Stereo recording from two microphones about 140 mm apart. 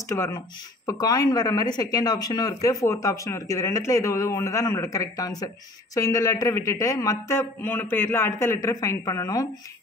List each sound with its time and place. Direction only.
0.1 s speech: 20° left (ahead or behind)